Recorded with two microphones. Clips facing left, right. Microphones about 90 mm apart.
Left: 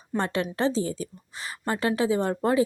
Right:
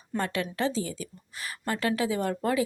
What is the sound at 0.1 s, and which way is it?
Speech, 5° left (ahead or behind).